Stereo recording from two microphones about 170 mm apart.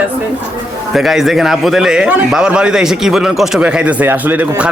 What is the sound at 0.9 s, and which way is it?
A man's voice, centre (ahead or behind).